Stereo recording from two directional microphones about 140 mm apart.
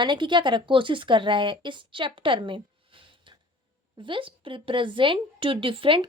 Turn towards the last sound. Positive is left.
turn(degrees=-40)  # may be behind; listen again after turning